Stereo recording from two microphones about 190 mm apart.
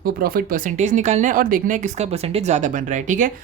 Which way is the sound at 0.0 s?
50° right (ahead or behind).